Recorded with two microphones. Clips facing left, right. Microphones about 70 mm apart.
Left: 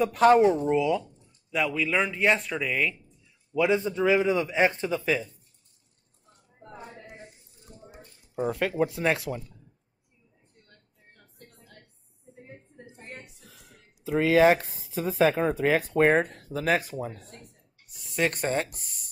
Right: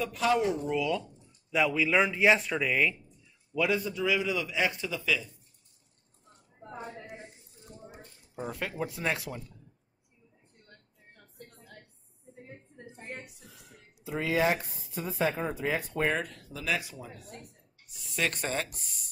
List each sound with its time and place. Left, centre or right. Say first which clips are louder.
0.0 s a man's voice: left 9 dB; left
1.2 s speech: even; centre
3.5 s a man's voice: left 5 dB; left
8.4 s speech: left 9 dB; left
12.4 s a sound: left 1 dB; centre
14.0 s speech: left 8 dB; left
14.5 s speech: left 7 dB; left
15.6 s speech: left 8 dB; left
16.1 s speech: left 8 dB; left
18.1 s a man's voice: left 5 dB; left